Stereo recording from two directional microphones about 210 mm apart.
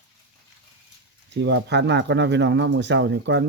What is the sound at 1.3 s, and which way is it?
Speech, 55° right (ahead or behind).